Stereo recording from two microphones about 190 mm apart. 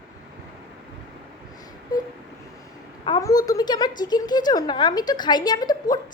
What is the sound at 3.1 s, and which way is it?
A woman's voice, 20° left (ahead or behind).